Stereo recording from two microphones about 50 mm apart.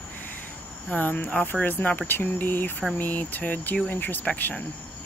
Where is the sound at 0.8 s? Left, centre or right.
Left.